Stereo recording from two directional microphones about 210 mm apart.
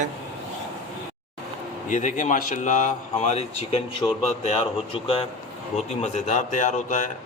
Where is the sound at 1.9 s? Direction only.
35° left (ahead or behind).